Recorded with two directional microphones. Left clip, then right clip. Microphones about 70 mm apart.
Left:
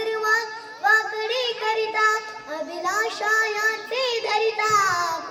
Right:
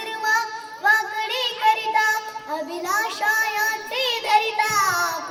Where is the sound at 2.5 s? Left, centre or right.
Left.